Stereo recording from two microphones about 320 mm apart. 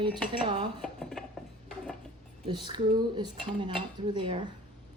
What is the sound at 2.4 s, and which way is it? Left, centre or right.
Speech, centre.